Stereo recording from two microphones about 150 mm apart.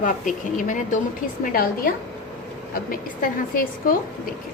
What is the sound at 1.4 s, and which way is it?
A woman's voice, 75° left (ahead or behind).